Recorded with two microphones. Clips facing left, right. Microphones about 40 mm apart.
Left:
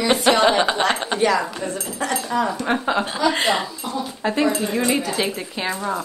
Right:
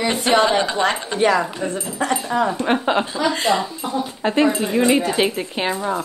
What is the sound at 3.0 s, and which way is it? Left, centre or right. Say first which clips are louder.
Speech: left 1 dB; left.